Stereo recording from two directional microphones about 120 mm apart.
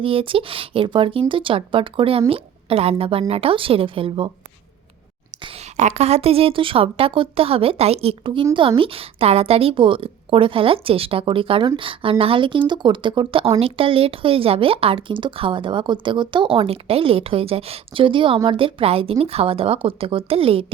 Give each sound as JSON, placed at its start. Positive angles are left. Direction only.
{"t": 0.0, "sound": "a woman's voice", "side_deg": -50}
{"t": 5.7, "sound": "a woman's voice", "side_deg": -70}